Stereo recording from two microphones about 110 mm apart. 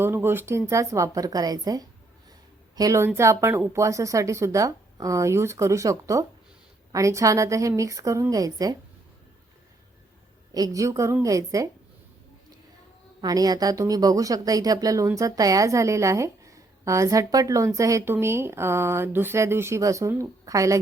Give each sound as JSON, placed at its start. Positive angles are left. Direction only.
{"t": 0.0, "sound": "a woman's voice", "side_deg": -20}
{"t": 10.5, "sound": "a woman's voice", "side_deg": -35}
{"t": 13.2, "sound": "a woman's voice", "side_deg": -35}